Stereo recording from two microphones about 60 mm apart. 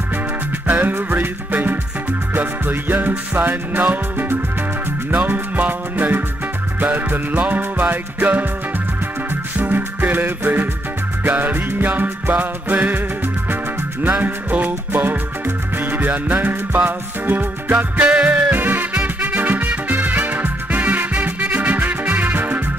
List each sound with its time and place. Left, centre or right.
0.7 s music: right
14.0 s music: right
17.9 s music: centre